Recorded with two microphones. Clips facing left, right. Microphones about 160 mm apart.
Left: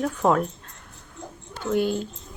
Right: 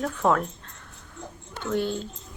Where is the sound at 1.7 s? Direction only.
15° left (ahead or behind).